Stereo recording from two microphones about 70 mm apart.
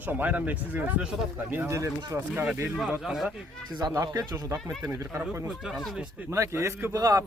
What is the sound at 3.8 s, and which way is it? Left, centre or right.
Speech, right.